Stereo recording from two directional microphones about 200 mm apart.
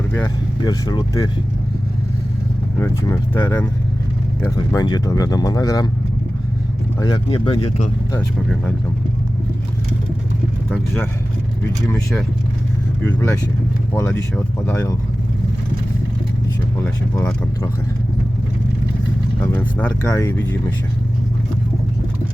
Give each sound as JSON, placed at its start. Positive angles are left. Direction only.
{"t": 0.1, "sound": "speech", "side_deg": 15}
{"t": 2.7, "sound": "speech", "side_deg": 15}
{"t": 7.0, "sound": "speech", "side_deg": 20}
{"t": 10.7, "sound": "speech", "side_deg": 10}
{"t": 13.0, "sound": "speech", "side_deg": 10}
{"t": 17.2, "sound": "speech", "side_deg": 15}
{"t": 19.4, "sound": "speech", "side_deg": 10}